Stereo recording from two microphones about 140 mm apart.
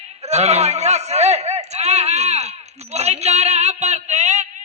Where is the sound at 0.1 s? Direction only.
50° right (ahead or behind).